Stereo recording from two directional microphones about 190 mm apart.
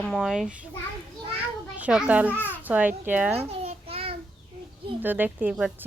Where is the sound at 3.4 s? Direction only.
35° right (ahead or behind).